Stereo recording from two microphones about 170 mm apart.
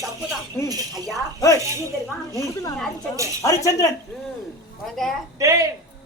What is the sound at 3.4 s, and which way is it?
Speech, 20° left (ahead or behind).